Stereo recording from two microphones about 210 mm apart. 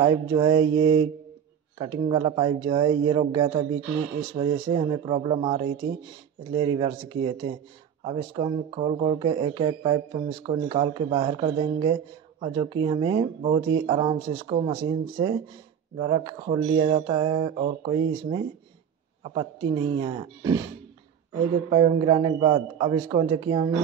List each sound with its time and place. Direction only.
0.0 s speech: 20° right (ahead or behind)
21.6 s speech: 20° right (ahead or behind)